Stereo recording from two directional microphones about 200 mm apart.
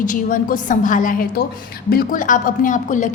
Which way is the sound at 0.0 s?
40° left (ahead or behind).